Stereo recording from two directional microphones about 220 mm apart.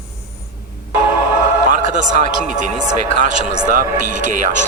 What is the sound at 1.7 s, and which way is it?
A man's voice, 35° right (ahead or behind).